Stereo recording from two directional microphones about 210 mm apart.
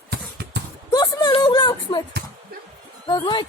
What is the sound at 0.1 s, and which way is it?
Horse, 50° right (ahead or behind).